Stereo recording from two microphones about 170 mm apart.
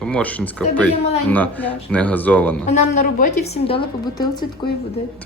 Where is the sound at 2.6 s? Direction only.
45° left (ahead or behind); by 4.7 s 25° left (ahead or behind).